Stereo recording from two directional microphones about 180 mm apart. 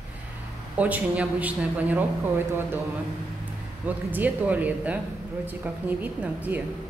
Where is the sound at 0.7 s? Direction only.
10° right (ahead or behind).